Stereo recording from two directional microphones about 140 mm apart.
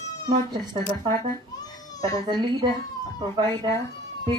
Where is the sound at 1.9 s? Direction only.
25° left (ahead or behind).